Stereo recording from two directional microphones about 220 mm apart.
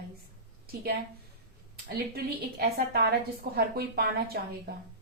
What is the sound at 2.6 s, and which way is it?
A woman's voice, 40° right (ahead or behind).